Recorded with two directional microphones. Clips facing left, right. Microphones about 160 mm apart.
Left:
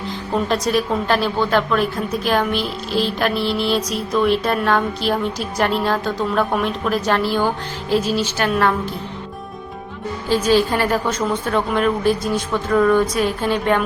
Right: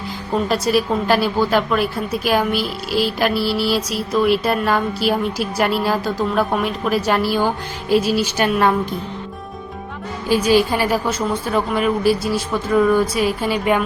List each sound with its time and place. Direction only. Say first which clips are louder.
0.4 s a woman's voice: right 2 dB; 5° right (ahead or behind)
10.2 s a woman's voice: right 1 dB; 10° right (ahead or behind)